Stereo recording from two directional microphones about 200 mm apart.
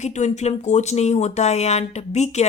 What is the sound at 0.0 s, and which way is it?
Speech, 35° left (ahead or behind).